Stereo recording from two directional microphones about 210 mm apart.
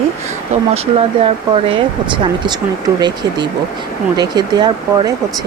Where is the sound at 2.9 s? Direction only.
20° right (ahead or behind).